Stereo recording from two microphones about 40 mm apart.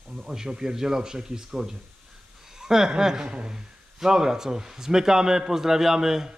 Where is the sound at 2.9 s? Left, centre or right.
Centre.